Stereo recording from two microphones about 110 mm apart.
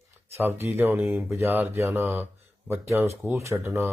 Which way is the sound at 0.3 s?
20° right (ahead or behind).